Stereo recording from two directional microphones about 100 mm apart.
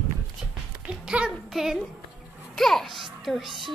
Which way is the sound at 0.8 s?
10° right (ahead or behind).